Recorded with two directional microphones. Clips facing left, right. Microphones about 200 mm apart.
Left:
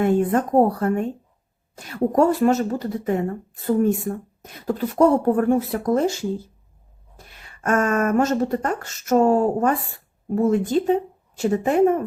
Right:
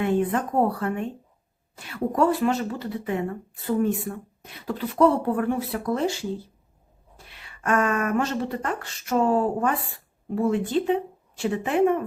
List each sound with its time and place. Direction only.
0.0 s speech: 45° left (ahead or behind)